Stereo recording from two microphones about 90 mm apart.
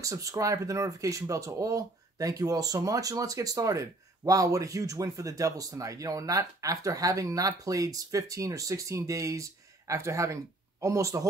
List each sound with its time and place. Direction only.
0.0 s speech: 40° right (ahead or behind)